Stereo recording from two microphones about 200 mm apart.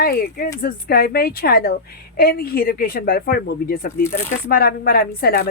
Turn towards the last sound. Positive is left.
turn(degrees=50)  # may be behind; listen again after turning